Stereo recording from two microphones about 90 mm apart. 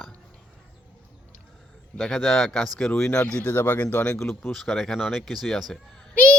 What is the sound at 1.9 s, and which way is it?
Speech, 5° left (ahead or behind).